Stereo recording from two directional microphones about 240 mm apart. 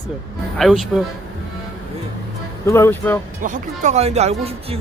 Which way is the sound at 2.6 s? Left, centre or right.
Centre.